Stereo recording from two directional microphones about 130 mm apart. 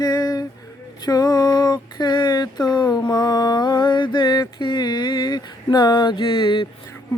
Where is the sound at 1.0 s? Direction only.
30° left (ahead or behind).